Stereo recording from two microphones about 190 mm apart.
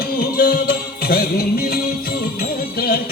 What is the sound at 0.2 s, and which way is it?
Music, 50° left (ahead or behind).